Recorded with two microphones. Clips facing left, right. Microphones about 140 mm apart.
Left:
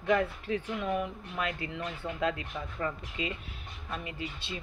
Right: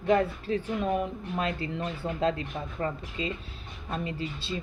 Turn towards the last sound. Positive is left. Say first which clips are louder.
# right 5 dB
turn(degrees=-30)  # may be behind; listen again after turning